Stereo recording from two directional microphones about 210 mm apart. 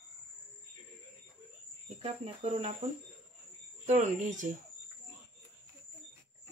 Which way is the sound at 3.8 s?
35° right (ahead or behind).